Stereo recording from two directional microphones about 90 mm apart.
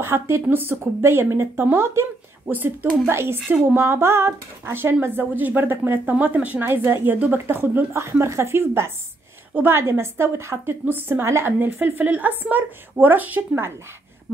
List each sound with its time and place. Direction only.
0.0 s a woman's voice: 30° right (ahead or behind)